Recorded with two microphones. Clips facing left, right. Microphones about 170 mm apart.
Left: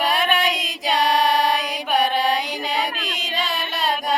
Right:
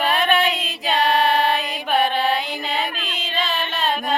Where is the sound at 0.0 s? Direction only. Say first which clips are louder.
Right 2 dB; 10° left (ahead or behind).